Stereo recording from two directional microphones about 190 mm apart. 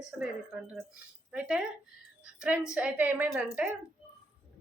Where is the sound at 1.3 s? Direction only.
5° right (ahead or behind).